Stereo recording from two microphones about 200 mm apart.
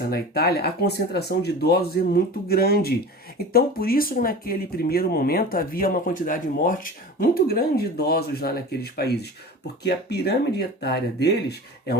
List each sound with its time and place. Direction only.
0.1 s speech: 50° left (ahead or behind)